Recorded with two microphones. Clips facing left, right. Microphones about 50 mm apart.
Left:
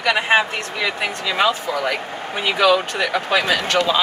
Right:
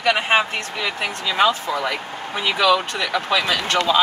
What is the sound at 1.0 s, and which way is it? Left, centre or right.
Speech, left.